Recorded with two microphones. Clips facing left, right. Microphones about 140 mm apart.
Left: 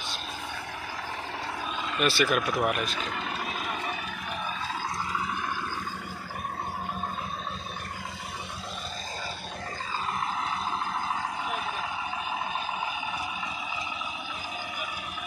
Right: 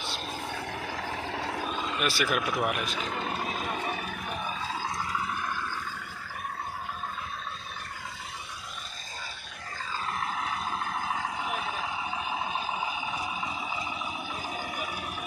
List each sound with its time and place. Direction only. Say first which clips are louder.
2.0 s speech: left 5 dB; 10° right (ahead or behind)
3.1 s vehicle: right 1 dB; 35° right (ahead or behind)